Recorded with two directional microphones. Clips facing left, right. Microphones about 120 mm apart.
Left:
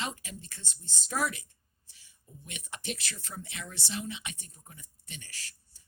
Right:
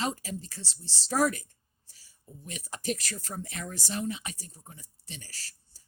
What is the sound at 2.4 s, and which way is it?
Speech, 35° right (ahead or behind).